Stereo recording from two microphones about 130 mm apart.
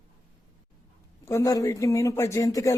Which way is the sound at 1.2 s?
25° left (ahead or behind).